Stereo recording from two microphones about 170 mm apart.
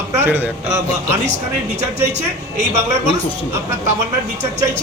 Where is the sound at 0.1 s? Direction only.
15° right (ahead or behind).